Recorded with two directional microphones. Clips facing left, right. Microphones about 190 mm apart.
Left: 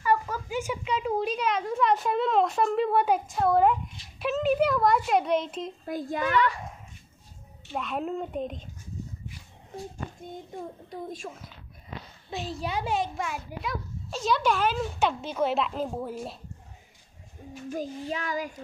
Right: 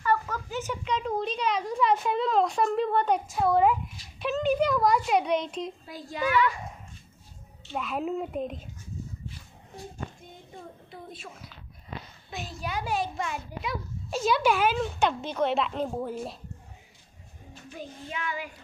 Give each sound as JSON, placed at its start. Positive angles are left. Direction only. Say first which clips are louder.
{"t": 0.0, "sound": "a woman's voice", "louder": "left 1 dB", "side_deg": 10}
{"t": 5.9, "sound": "a child's voice", "louder": "left 3 dB", "side_deg": 50}
{"t": 7.7, "sound": "a child's voice", "louder": "right 1 dB", "side_deg": 0}
{"t": 10.9, "sound": "child singing", "louder": "left 7 dB", "side_deg": 40}
{"t": 12.3, "sound": "a child's voice", "louder": "left 4 dB", "side_deg": 30}
{"t": 13.2, "sound": "a child's voice", "louder": "even", "side_deg": 5}
{"t": 17.6, "sound": "child singing", "louder": "left 8 dB", "side_deg": 40}